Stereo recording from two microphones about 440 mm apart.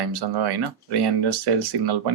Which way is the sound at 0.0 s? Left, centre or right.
Right.